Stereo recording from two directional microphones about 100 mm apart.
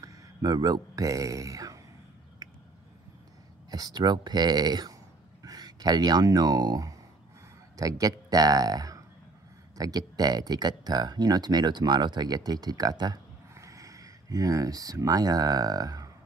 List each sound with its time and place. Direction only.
0.0 s speech: 40° right (ahead or behind)
3.7 s speech: 40° right (ahead or behind)
13.6 s speech: 35° right (ahead or behind)